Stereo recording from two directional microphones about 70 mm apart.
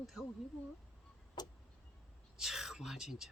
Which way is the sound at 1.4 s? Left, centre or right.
Left.